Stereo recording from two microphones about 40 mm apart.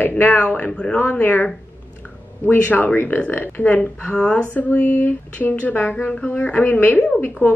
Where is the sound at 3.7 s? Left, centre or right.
Left.